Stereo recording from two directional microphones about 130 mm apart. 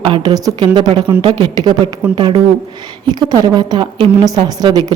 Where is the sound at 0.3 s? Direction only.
30° right (ahead or behind).